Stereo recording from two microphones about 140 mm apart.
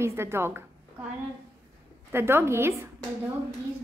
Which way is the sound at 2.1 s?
15° right (ahead or behind).